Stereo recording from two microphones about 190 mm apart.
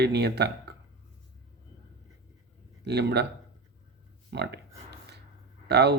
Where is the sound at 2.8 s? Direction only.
60° right (ahead or behind).